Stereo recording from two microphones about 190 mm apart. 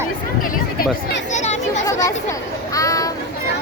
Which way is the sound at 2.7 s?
20° left (ahead or behind).